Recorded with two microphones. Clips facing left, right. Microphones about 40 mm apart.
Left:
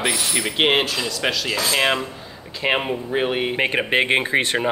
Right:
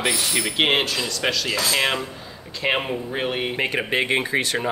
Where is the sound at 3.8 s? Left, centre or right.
Left.